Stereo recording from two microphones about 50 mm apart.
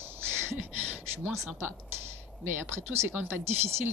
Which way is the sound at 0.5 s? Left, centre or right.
Right.